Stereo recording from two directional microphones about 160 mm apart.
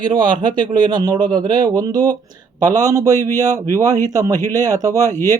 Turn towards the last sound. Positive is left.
turn(degrees=-20)  # may be behind; listen again after turning